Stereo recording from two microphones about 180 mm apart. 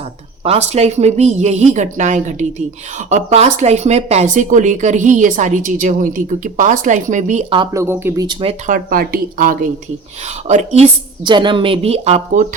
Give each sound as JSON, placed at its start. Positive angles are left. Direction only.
{"t": 0.4, "sound": "a woman's voice", "side_deg": -35}
{"t": 7.5, "sound": "speech", "side_deg": -20}
{"t": 8.6, "sound": "speech", "side_deg": -50}
{"t": 10.5, "sound": "a woman's voice", "side_deg": -40}
{"t": 11.3, "sound": "a woman's voice", "side_deg": -25}